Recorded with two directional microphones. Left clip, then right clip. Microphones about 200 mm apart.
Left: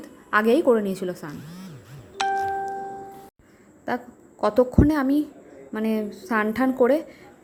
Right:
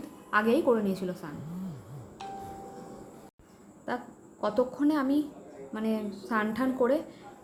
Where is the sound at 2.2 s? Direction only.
50° left (ahead or behind).